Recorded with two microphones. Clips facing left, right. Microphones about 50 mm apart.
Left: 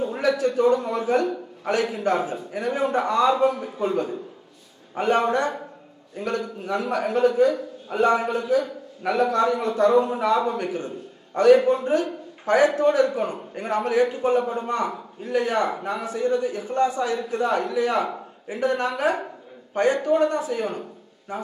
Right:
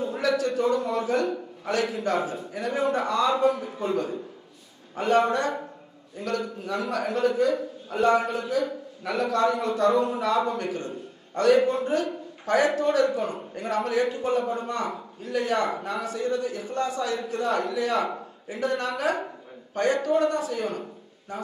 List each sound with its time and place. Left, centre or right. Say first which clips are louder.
0.0 s a man's voice: left 3 dB; left